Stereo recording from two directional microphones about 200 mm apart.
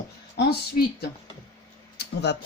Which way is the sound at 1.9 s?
55° left (ahead or behind).